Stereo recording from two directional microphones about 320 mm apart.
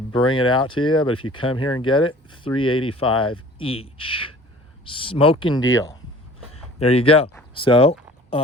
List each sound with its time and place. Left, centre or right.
0.1 s speech: centre